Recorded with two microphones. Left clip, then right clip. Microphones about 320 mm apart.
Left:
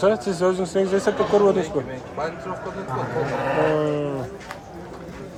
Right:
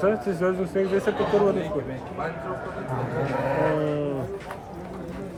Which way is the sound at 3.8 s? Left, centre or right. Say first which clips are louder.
Left 3 dB; centre.